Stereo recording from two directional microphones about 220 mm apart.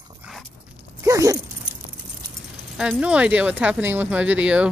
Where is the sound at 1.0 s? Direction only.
15° right (ahead or behind).